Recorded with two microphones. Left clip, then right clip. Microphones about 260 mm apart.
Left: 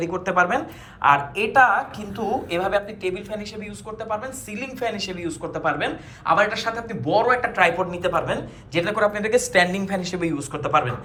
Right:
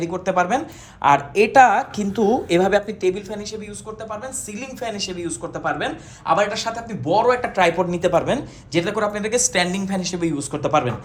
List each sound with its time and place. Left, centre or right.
0.0 s a woman's voice: centre